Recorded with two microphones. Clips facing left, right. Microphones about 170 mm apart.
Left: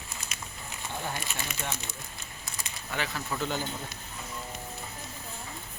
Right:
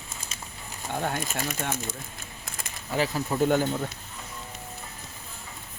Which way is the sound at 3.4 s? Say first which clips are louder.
Right 11 dB; 50° right (ahead or behind).